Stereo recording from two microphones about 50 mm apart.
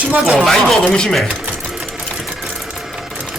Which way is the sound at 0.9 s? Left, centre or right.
Centre.